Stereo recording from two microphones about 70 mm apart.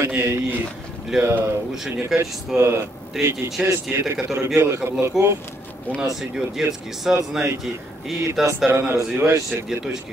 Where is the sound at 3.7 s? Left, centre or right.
Right.